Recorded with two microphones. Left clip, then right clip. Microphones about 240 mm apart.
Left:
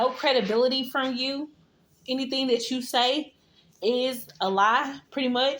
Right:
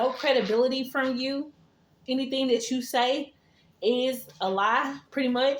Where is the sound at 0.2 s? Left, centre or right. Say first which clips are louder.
Left 1 dB; left.